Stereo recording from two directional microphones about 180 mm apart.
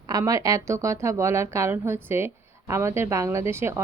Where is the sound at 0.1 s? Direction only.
20° right (ahead or behind).